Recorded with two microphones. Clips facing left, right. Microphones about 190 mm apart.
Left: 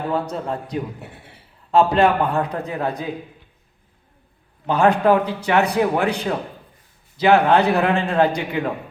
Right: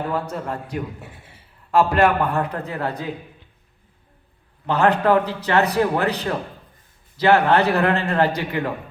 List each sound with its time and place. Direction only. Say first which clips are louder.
0.1 s a man's voice: left 2 dB; 20° left (ahead or behind)
4.6 s a man's voice: left 2 dB; 15° left (ahead or behind)